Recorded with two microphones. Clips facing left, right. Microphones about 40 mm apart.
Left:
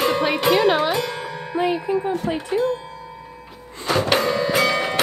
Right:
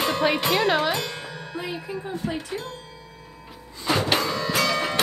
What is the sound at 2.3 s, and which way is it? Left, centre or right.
Music, left.